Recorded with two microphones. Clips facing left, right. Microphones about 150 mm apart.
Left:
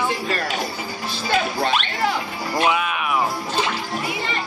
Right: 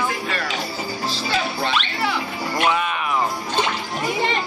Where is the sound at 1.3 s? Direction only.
45° left (ahead or behind).